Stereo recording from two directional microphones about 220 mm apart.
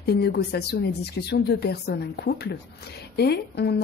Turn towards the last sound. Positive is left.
turn(degrees=45)  # may be behind; listen again after turning